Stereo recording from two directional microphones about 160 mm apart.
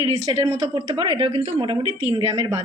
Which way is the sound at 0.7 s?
30° right (ahead or behind).